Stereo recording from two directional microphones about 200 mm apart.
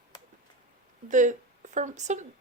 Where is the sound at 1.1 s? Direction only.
40° right (ahead or behind).